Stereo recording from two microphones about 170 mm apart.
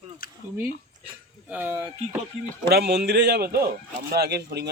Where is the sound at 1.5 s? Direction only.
10° right (ahead or behind).